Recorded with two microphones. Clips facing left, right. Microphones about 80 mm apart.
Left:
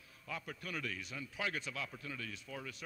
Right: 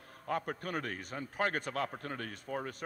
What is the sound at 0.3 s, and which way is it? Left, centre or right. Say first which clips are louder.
A man's voice: right 9 dB; right.